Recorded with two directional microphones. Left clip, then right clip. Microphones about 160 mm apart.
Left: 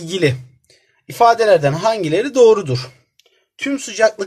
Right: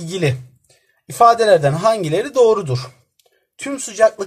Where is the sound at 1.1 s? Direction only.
Centre (ahead or behind).